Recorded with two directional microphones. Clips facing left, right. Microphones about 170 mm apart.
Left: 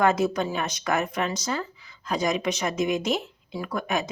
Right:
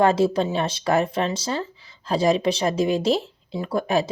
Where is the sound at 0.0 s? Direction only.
30° right (ahead or behind).